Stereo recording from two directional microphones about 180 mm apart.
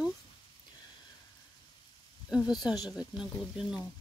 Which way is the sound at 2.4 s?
20° left (ahead or behind).